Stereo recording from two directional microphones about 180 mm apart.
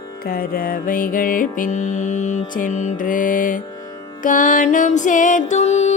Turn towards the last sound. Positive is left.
turn(degrees=35)  # may be behind; listen again after turning